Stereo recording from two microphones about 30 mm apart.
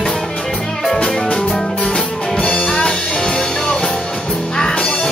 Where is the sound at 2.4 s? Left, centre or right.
Left.